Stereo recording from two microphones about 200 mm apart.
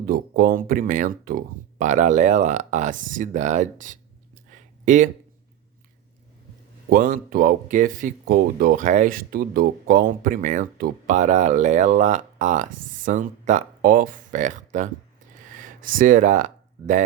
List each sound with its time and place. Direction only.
0.0 s speech: 45° right (ahead or behind)
6.9 s speech: 45° right (ahead or behind)